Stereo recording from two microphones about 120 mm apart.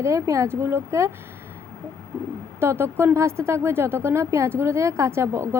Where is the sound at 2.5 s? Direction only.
20° right (ahead or behind).